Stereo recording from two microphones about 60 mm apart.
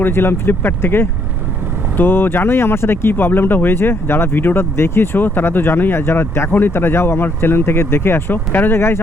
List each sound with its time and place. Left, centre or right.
0.0 s speech: left